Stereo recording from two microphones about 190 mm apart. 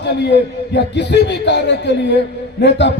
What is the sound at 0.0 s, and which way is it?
A man's voice, 65° left (ahead or behind).